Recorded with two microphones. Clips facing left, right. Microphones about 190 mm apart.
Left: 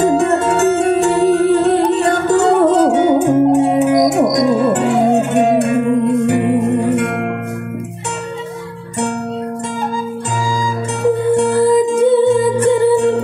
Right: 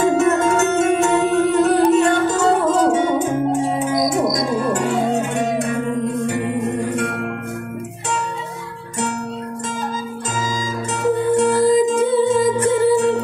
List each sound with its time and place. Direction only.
0.0 s music: 35° left (ahead or behind)
2.3 s music: 65° left (ahead or behind)
11.5 s music: 60° left (ahead or behind)